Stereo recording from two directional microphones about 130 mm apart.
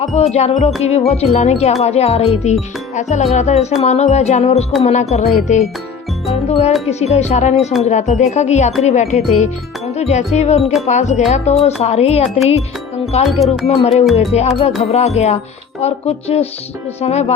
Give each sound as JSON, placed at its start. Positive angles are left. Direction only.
{"t": 0.0, "sound": "speech", "side_deg": 60}
{"t": 13.2, "sound": "speech", "side_deg": 0}
{"t": 13.7, "sound": "speech", "side_deg": 55}
{"t": 14.1, "sound": "speech", "side_deg": 0}
{"t": 14.3, "sound": "speech", "side_deg": 55}